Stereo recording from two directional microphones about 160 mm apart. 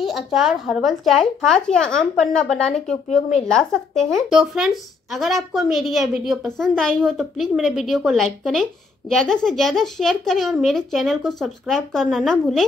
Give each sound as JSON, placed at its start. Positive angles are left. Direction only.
{"t": 0.0, "sound": "a woman's voice", "side_deg": 0}
{"t": 3.1, "sound": "a woman's voice", "side_deg": 45}
{"t": 3.4, "sound": "a woman's voice", "side_deg": 5}